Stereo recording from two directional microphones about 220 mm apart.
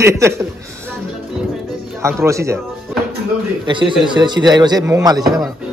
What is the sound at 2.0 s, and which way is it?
Speech, 10° right (ahead or behind).